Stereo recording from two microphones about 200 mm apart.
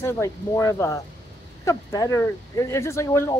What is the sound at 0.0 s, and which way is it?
Speech, 15° left (ahead or behind).